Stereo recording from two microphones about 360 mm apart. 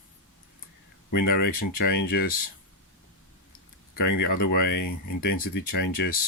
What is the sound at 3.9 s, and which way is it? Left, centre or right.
Speech, left.